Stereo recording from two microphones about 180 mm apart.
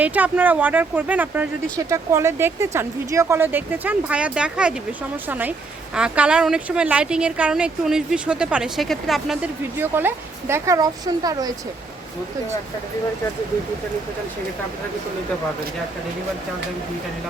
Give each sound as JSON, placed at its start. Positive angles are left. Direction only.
{"t": 0.0, "sound": "speech", "side_deg": -10}
{"t": 9.7, "sound": "speech", "side_deg": -10}